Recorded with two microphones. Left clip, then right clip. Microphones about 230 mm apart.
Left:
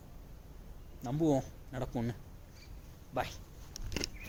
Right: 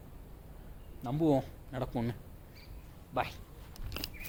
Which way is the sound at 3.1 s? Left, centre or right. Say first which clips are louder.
Right 2 dB; centre.